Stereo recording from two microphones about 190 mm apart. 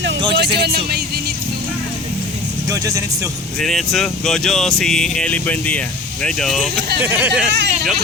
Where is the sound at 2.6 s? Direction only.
15° right (ahead or behind).